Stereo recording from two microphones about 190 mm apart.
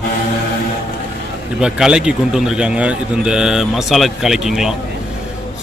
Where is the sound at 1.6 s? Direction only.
5° right (ahead or behind).